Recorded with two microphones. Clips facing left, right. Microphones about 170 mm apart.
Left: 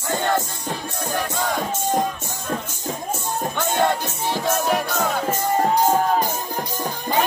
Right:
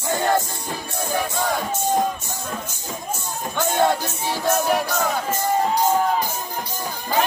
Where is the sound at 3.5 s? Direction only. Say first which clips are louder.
Right 2 dB; 5° right (ahead or behind).